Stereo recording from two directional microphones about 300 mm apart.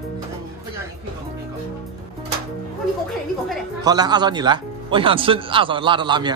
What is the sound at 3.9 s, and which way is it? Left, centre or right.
Speech, centre.